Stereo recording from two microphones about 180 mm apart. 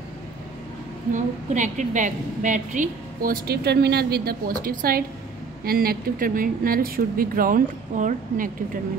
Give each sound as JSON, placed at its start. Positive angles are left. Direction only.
{"t": 1.1, "sound": "a woman's voice", "side_deg": -45}